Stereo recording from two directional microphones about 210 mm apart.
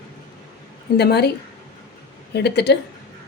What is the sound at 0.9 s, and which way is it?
Speech, 50° left (ahead or behind).